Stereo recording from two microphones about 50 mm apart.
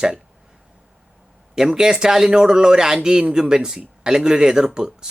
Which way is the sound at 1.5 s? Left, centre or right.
Centre.